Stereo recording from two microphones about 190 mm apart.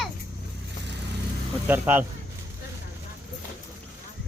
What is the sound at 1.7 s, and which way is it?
Speech, 10° right (ahead or behind).